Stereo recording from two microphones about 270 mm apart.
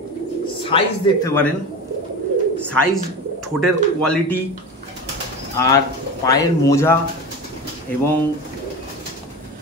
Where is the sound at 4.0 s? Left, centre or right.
Centre.